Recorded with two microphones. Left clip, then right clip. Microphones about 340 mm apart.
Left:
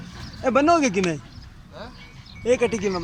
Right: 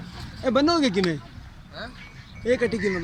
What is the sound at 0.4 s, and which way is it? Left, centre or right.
Speech, centre.